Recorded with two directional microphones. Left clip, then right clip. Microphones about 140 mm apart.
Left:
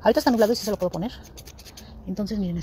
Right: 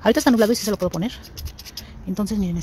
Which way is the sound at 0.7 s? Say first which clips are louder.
Right 2 dB; 70° right (ahead or behind).